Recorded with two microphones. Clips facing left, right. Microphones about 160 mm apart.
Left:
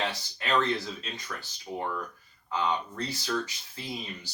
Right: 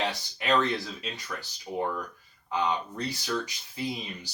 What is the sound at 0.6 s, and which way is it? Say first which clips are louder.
Speech: even; 20° right (ahead or behind).